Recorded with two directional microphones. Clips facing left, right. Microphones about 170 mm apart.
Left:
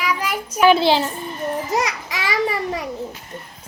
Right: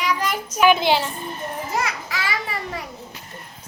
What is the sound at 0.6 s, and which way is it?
Speech, 35° left (ahead or behind).